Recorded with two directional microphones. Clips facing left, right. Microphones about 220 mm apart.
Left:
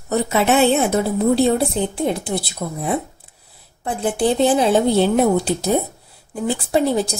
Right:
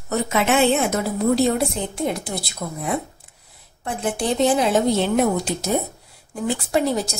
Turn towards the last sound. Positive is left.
turn(degrees=30)  # may be behind; listen again after turning